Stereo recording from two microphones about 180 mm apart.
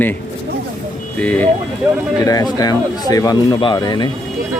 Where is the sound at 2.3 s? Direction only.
20° left (ahead or behind).